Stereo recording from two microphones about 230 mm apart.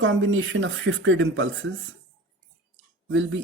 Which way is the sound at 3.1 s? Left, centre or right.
Right.